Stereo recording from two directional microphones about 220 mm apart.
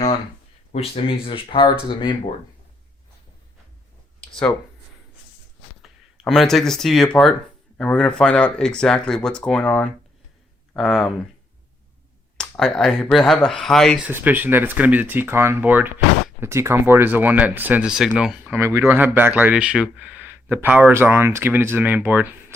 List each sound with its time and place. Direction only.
0.7 s speech: 25° left (ahead or behind)
5.8 s speech: centre (ahead or behind)
12.4 s speech: centre (ahead or behind)
14.1 s speech: 10° right (ahead or behind)